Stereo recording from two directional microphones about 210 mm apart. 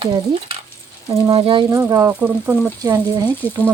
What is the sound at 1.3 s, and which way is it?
Speech, 25° right (ahead or behind).